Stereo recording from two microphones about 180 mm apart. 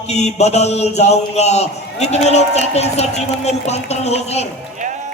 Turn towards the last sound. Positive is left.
turn(degrees=35)  # may be behind; listen again after turning